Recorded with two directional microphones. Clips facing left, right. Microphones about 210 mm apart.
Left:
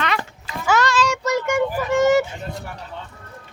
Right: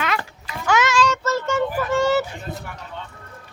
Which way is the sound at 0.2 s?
5° left (ahead or behind).